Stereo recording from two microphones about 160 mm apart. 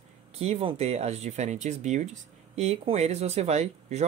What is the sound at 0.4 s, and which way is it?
Speech, 40° right (ahead or behind).